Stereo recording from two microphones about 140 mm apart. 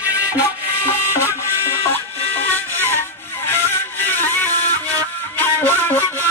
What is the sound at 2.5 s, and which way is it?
Music, 15° left (ahead or behind).